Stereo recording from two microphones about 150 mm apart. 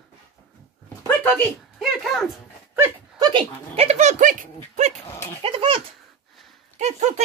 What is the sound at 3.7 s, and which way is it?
Speech, 45° right (ahead or behind).